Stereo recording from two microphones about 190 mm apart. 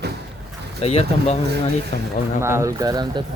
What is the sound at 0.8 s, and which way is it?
Speech, 30° left (ahead or behind).